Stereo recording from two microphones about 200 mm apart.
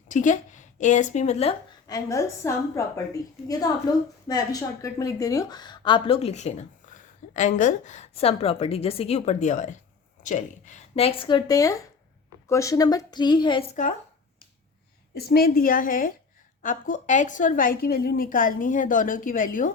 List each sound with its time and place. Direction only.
0.1 s speech: 40° left (ahead or behind)
1.9 s a woman's voice: 15° left (ahead or behind)
15.1 s a woman's voice: 50° left (ahead or behind)